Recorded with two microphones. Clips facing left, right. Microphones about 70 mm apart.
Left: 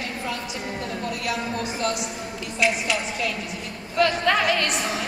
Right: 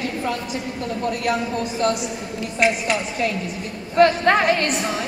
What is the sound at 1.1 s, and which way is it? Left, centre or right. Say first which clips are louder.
A woman's voice: right 5 dB; right.